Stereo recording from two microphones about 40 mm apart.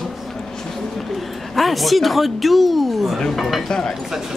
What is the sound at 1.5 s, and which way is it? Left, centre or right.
Speech, centre.